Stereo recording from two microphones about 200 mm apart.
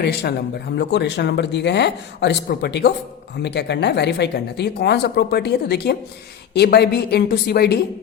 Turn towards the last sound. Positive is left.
turn(degrees=55)  # may be behind; listen again after turning